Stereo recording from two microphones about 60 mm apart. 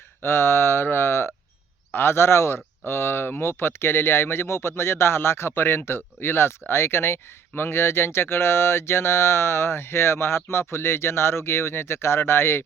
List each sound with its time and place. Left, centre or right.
0.2 s speech: left